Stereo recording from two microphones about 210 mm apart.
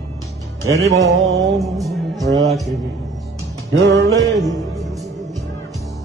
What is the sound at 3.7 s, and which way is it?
Music, 55° right (ahead or behind).